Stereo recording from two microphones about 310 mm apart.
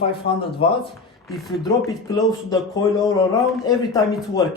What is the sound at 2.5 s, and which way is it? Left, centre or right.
Speech, centre.